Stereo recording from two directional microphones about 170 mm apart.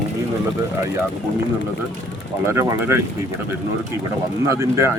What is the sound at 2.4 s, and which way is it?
Speech, 15° right (ahead or behind).